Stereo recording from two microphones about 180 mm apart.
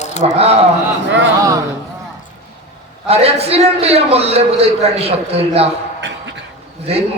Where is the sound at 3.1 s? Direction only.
35° right (ahead or behind).